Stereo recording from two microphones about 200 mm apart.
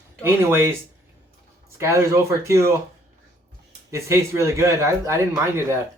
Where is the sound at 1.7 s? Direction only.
15° right (ahead or behind).